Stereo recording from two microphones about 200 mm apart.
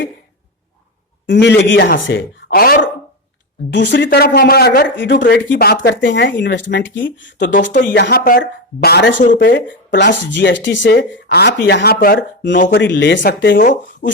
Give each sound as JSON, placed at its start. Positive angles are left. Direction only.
{"t": 1.3, "sound": "speech", "side_deg": 60}
{"t": 2.5, "sound": "speech", "side_deg": 50}
{"t": 3.7, "sound": "speech", "side_deg": 60}
{"t": 12.7, "sound": "speech", "side_deg": 65}
{"t": 14.0, "sound": "chopping", "side_deg": 40}